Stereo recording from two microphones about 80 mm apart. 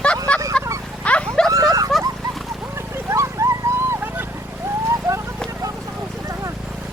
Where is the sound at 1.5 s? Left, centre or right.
Right.